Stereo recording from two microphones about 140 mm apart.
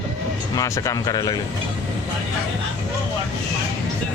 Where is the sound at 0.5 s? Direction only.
25° left (ahead or behind).